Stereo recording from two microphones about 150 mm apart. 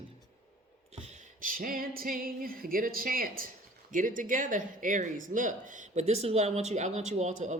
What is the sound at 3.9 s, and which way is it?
Speech, 65° right (ahead or behind).